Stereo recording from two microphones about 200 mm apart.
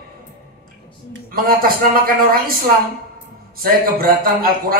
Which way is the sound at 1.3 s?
45° right (ahead or behind).